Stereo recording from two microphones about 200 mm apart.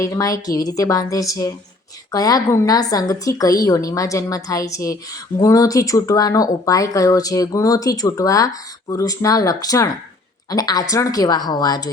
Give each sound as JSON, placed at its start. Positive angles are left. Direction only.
{"t": 0.0, "sound": "a woman's voice", "side_deg": 15}